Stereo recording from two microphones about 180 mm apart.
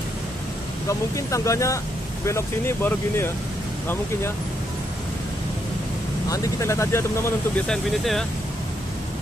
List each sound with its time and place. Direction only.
0.8 s speech: 15° left (ahead or behind)
6.2 s speech: 20° left (ahead or behind); by 8.3 s centre (ahead or behind)